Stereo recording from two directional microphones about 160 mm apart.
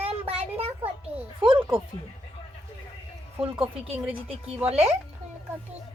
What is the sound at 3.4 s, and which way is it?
A woman's voice, 35° right (ahead or behind).